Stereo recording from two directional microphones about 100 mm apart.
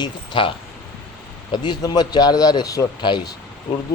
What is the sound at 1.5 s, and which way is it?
A man's voice, 45° left (ahead or behind).